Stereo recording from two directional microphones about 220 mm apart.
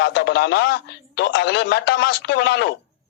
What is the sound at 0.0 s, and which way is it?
Speech, 50° left (ahead or behind).